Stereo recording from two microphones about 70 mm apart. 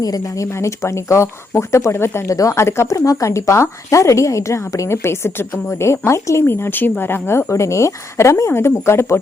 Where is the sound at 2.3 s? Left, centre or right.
Left.